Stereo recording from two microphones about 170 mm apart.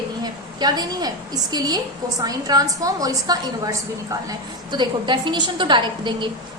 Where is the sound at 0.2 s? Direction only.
25° right (ahead or behind).